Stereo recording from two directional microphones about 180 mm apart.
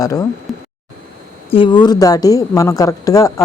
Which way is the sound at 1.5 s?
30° left (ahead or behind).